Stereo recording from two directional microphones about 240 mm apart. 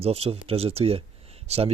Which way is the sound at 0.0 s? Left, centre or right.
Right.